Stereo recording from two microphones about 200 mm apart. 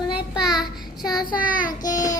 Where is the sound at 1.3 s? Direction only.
45° left (ahead or behind).